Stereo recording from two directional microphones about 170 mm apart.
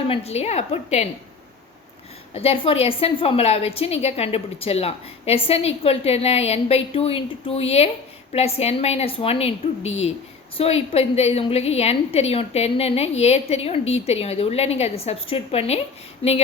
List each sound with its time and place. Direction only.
0.1 s a woman's voice: 40° left (ahead or behind)
2.3 s a woman's voice: 35° left (ahead or behind)